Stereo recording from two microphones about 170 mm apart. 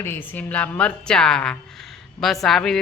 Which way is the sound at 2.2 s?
Centre (ahead or behind).